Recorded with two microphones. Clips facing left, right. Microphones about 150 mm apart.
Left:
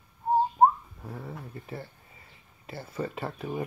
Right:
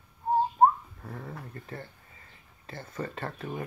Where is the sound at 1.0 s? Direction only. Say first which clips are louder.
Left 1 dB; 10° left (ahead or behind).